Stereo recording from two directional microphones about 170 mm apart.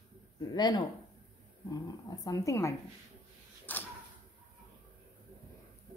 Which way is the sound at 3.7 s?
10° left (ahead or behind).